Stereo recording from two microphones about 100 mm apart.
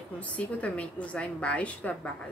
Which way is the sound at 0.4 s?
15° left (ahead or behind).